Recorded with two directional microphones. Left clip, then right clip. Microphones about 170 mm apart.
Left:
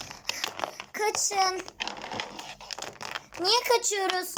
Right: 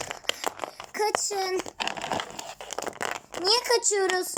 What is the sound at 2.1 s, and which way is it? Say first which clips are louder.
Crumpling: right 3 dB; 75° right (ahead or behind).